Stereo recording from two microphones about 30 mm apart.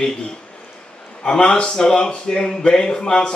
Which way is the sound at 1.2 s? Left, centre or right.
Left.